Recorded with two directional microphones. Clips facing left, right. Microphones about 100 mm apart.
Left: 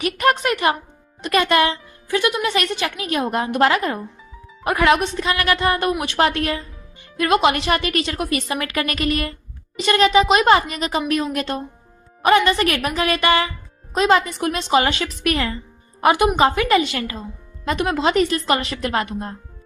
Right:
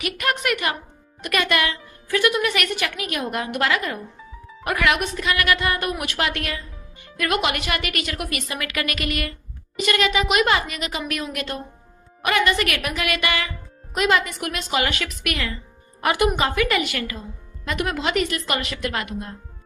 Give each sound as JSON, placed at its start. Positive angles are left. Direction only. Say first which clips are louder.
{"t": 0.0, "sound": "a woman's voice", "louder": "left 6 dB", "side_deg": 35}
{"t": 2.0, "sound": "a woman's voice", "louder": "even", "side_deg": 20}